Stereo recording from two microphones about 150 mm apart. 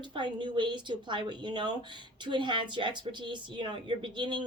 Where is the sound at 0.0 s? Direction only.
30° right (ahead or behind).